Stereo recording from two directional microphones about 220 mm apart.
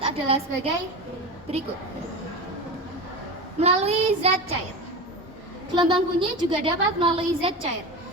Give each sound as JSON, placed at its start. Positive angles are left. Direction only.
{"t": 0.0, "sound": "a woman's voice", "side_deg": -25}
{"t": 3.6, "sound": "a woman's voice", "side_deg": -30}
{"t": 5.7, "sound": "a woman's voice", "side_deg": -20}